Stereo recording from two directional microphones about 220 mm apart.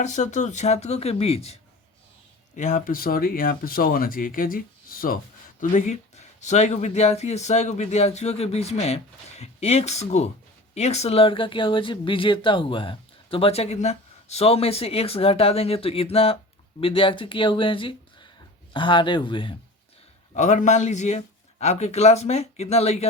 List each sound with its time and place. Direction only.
0.0 s speech: 35° left (ahead or behind)
2.6 s speech: 35° left (ahead or behind)
20.3 s speech: 35° left (ahead or behind)